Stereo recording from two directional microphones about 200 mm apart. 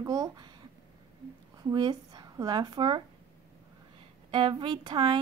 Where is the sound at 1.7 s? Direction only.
20° right (ahead or behind).